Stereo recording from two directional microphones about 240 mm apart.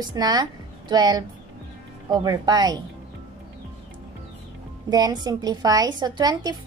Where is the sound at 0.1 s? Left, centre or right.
Centre.